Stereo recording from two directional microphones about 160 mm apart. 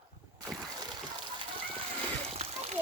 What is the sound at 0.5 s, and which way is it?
Splash, 25° right (ahead or behind).